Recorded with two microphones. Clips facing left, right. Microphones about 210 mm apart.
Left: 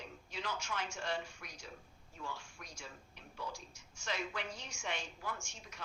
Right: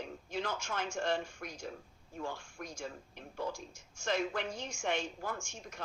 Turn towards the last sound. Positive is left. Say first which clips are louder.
# right 6 dB
turn(degrees=-50)  # may be behind; listen again after turning